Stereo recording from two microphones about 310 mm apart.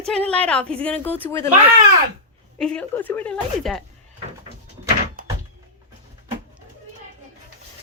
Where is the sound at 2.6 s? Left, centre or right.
Centre.